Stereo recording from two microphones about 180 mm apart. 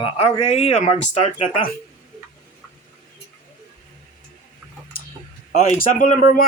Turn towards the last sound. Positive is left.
turn(degrees=50)  # may be behind; listen again after turning